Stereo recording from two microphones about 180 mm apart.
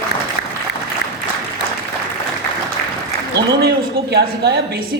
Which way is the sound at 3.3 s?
65° right (ahead or behind).